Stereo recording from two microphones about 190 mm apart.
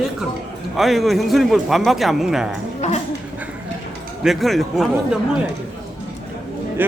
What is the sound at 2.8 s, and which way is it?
Speech, 35° left (ahead or behind).